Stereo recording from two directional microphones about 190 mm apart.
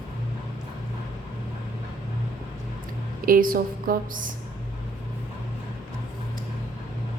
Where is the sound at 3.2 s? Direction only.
50° right (ahead or behind).